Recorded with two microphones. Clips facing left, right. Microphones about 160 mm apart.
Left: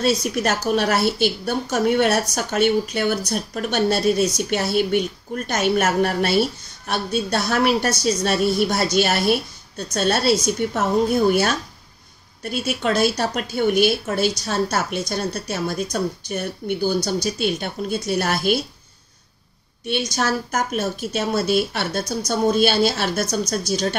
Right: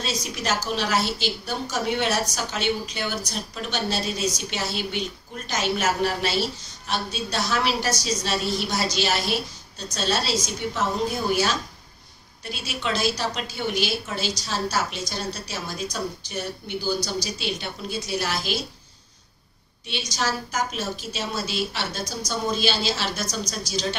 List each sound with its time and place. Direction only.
0.0 s a woman's voice: 55° left (ahead or behind)
19.9 s a woman's voice: 55° left (ahead or behind)